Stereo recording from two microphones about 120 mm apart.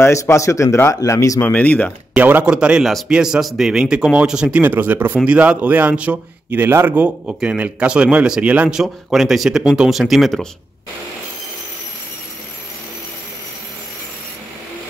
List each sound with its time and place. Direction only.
0.0 s a man's voice: 25° left (ahead or behind)
1.4 s speech: 10° left (ahead or behind)
2.1 s a man's voice: 15° right (ahead or behind)